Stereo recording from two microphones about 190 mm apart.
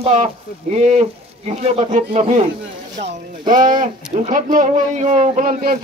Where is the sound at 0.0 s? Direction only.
35° right (ahead or behind).